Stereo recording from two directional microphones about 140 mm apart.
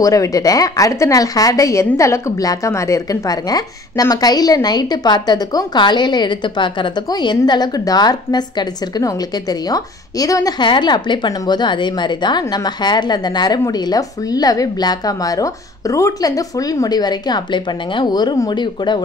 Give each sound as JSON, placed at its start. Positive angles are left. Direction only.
{"t": 0.0, "sound": "a woman's voice", "side_deg": 25}